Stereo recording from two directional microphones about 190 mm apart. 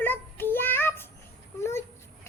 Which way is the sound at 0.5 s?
10° left (ahead or behind).